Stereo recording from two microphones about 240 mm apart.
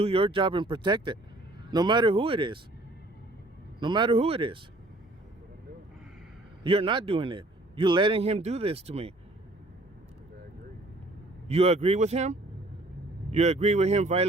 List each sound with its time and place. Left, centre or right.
0.0 s a man's voice: right
3.8 s a man's voice: centre
6.7 s a man's voice: right
11.4 s a man's voice: right